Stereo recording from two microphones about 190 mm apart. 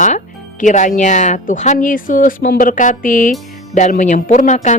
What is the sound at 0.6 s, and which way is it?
A woman's voice, 40° left (ahead or behind).